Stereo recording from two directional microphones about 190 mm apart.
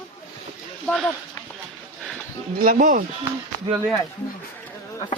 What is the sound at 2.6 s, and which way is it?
Speech, 45° right (ahead or behind).